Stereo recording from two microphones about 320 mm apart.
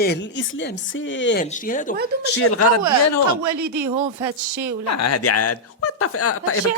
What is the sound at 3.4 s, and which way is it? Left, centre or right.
A woman's voice, right.